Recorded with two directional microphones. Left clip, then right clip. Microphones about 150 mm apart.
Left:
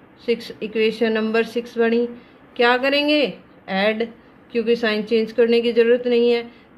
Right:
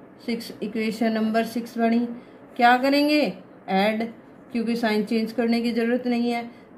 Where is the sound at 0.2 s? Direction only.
50° left (ahead or behind).